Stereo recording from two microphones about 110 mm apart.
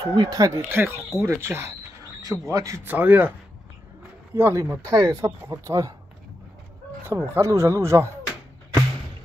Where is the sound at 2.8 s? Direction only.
15° right (ahead or behind).